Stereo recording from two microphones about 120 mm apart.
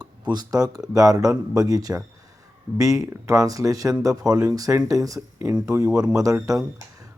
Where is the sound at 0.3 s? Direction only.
35° right (ahead or behind).